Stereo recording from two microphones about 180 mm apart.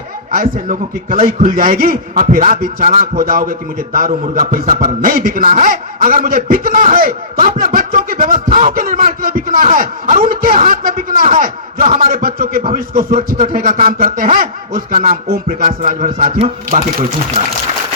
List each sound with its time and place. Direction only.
0.3 s a man's voice: 50° right (ahead or behind)